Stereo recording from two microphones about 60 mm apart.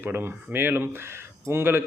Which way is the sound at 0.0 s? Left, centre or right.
Right.